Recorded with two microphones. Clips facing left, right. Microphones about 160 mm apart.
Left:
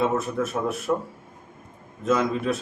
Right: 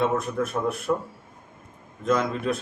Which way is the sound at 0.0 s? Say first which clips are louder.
Even; centre (ahead or behind).